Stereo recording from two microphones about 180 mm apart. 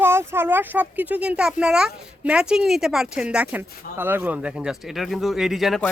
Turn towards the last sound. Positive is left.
turn(degrees=0)  # may be behind; listen again after turning